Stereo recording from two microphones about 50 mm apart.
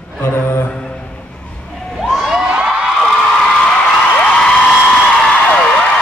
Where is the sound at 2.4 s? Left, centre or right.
Right.